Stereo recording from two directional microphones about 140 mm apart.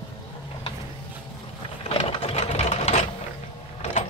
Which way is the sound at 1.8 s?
45° left (ahead or behind).